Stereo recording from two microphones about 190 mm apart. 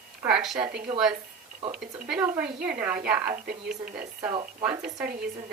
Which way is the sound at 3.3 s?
45° right (ahead or behind).